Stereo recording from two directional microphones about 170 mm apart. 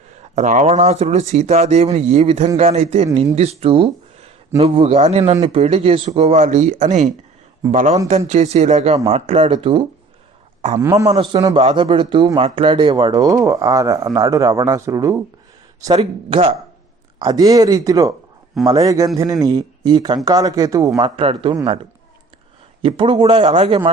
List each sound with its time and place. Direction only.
0.3 s speech: 45° right (ahead or behind)
10.8 s speech: 15° right (ahead or behind)
15.9 s speech: 35° right (ahead or behind)
21.2 s speech: 30° right (ahead or behind)
22.8 s speech: 30° right (ahead or behind)